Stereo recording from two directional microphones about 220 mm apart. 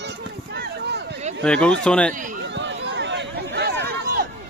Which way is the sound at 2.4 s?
55° right (ahead or behind).